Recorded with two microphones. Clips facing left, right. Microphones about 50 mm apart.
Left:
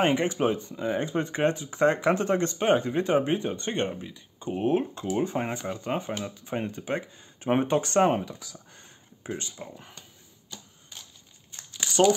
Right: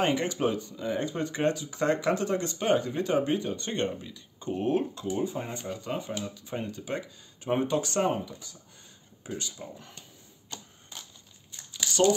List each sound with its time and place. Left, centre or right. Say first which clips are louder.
0.0 s speech: left 3 dB; left
5.1 s speech: left 5 dB; left
5.7 s speech: left 3 dB; left
9.2 s speech: left 2 dB; left